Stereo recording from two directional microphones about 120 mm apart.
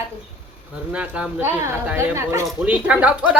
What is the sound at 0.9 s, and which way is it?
A woman's voice, 10° right (ahead or behind).